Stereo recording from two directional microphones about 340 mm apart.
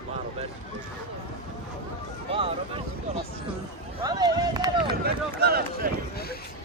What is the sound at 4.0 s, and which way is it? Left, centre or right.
Run, centre.